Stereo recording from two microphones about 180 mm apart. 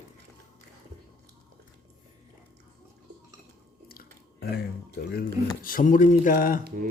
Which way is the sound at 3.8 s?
55° left (ahead or behind).